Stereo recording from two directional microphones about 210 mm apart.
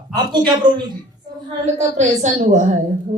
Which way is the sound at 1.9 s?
35° right (ahead or behind).